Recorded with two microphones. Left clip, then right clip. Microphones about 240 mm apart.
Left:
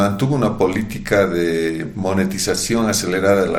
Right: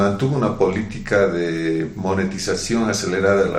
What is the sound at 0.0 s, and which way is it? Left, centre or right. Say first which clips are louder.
Speech: left 1 dB; left.